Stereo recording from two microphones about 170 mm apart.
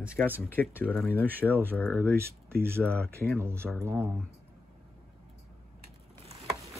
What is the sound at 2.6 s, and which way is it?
Speech, 15° right (ahead or behind).